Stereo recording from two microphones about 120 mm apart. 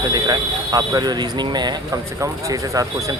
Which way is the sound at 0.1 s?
35° right (ahead or behind).